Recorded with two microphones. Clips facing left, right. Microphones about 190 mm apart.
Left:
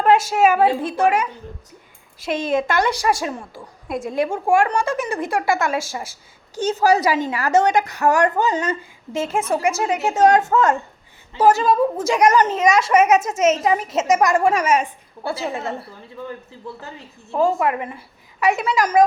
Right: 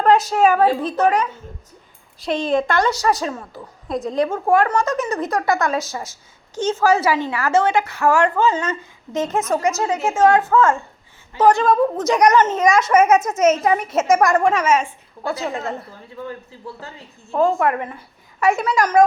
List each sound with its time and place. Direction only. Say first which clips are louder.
0.0 s a woman's voice: right 1 dB; 10° left (ahead or behind)
6.6 s a woman's voice: right 1 dB; 35° left (ahead or behind)
7.0 s a woman's voice: even; 15° left (ahead or behind)
7.4 s a woman's voice: left 1 dB; 40° left (ahead or behind)
8.4 s a woman's voice: right 1 dB; 15° left (ahead or behind)
11.3 s a woman's voice: right 1 dB; 5° left (ahead or behind)
11.9 s a child's voice: right 1 dB; 30° left (ahead or behind)
14.3 s a woman's voice: right 1 dB; 10° left (ahead or behind)
17.3 s a woman's voice: right 1 dB; 5° left (ahead or behind)